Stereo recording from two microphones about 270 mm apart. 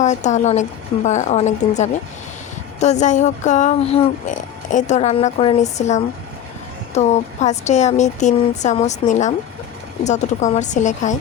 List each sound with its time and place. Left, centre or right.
0.0 s speech: left